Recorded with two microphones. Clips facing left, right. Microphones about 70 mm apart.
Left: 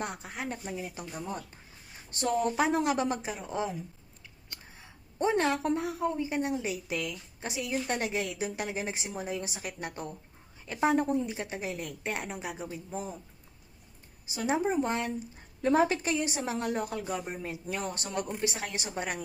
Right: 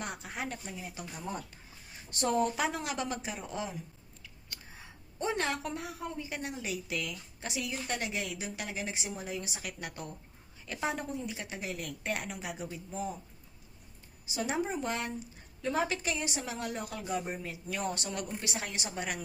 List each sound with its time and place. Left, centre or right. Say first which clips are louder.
0.0 s a woman's voice: left 2 dB; left
2.6 s a woman's voice: left 6 dB; left
4.2 s scissors: even; left
5.2 s a woman's voice: left 6 dB; left
14.3 s a woman's voice: left 4 dB; left